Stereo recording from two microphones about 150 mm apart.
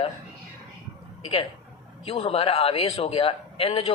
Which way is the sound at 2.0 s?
40° left (ahead or behind).